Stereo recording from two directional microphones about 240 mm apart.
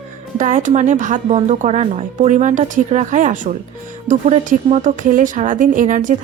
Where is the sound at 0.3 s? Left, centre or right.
Right.